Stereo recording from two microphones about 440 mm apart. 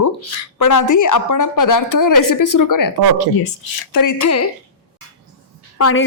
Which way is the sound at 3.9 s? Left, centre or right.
Left.